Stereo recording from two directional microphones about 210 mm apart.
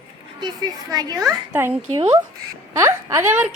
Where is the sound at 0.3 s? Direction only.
20° right (ahead or behind).